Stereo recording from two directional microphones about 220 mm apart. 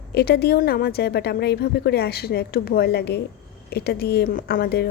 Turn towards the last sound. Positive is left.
turn(degrees=45)  # may be behind; listen again after turning